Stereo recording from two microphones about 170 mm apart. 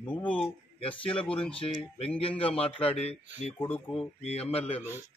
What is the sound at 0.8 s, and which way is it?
Speech, 30° left (ahead or behind).